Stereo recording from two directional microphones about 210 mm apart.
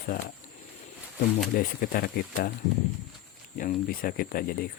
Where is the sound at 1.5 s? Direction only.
45° left (ahead or behind).